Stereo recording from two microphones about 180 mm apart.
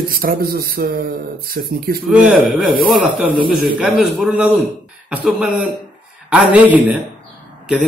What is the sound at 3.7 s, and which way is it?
Speech, 5° right (ahead or behind).